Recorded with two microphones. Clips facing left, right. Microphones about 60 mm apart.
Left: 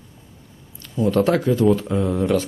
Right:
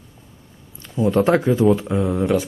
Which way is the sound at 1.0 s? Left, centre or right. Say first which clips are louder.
Right 2 dB; right.